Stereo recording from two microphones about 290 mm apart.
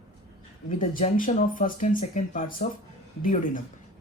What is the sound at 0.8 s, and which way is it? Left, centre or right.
A woman's voice, left.